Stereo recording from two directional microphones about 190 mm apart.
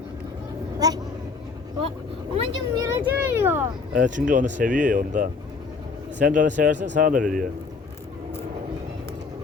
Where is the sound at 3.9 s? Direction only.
40° right (ahead or behind).